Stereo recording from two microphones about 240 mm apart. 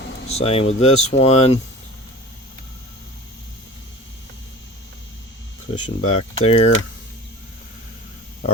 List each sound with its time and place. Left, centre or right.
0.3 s speech: left
6.0 s speech: left